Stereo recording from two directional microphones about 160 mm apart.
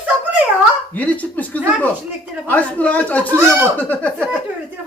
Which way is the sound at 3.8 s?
10° left (ahead or behind).